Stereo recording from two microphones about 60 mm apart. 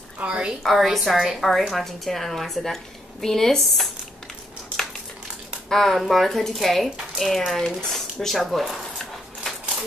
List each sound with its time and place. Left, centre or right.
0.2 s a woman's voice: centre
0.7 s a woman's voice: centre
5.7 s speech: centre